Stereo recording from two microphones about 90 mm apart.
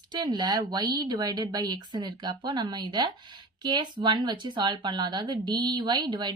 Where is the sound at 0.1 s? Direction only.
55° right (ahead or behind).